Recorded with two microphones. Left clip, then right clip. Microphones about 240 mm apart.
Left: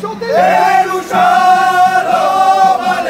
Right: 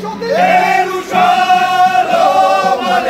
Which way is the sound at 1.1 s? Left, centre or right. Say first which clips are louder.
Left 1 dB; left.